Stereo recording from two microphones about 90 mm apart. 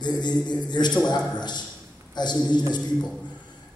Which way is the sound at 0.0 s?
55° left (ahead or behind).